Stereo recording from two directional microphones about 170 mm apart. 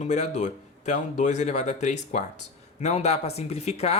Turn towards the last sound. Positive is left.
turn(degrees=35)  # may be behind; listen again after turning